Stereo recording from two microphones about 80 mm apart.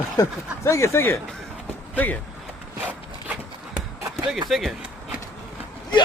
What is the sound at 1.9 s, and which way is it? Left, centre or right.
Speech, centre.